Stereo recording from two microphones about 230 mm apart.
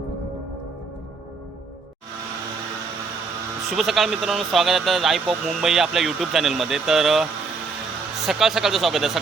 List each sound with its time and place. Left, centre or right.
3.7 s speech: centre
8.3 s speech: centre